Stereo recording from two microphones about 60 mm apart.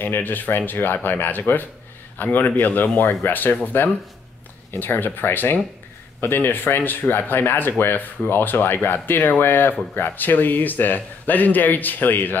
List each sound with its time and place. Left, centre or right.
0.0 s speech: left